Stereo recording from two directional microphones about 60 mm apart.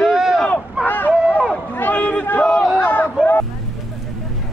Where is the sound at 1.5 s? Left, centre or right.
Left.